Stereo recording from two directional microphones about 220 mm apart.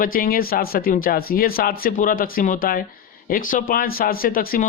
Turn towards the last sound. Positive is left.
turn(degrees=40)  # may be behind; listen again after turning